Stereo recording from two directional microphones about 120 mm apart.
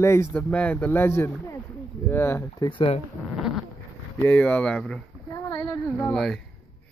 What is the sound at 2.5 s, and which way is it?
Speech, 40° left (ahead or behind).